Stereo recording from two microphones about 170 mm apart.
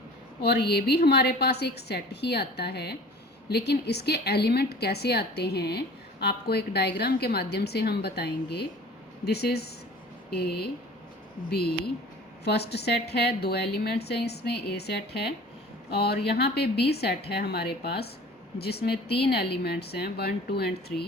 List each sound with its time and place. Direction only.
0.4 s a woman's voice: 75° left (ahead or behind)